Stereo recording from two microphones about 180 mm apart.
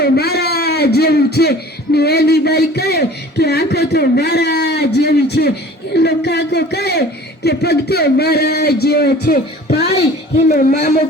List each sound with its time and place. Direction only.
0.0 s a man's voice: 60° left (ahead or behind)